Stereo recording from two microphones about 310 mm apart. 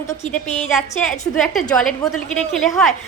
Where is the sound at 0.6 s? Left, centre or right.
Centre.